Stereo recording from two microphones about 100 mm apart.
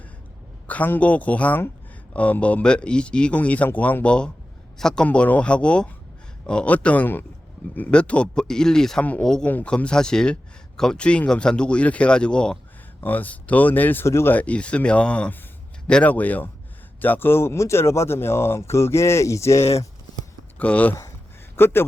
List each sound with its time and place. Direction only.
0.7 s speech: 15° left (ahead or behind)
20.6 s speech: 15° left (ahead or behind)